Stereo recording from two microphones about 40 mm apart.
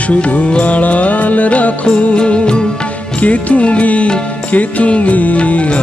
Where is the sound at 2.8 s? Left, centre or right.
Left.